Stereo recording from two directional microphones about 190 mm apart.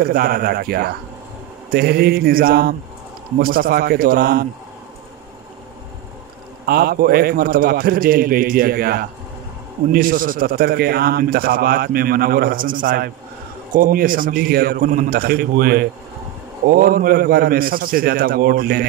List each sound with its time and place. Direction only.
0.0 s a man's voice: 50° right (ahead or behind)
1.7 s mantra: 55° right (ahead or behind)
3.3 s a man's voice: 50° right (ahead or behind)
6.6 s a man's voice: 55° right (ahead or behind)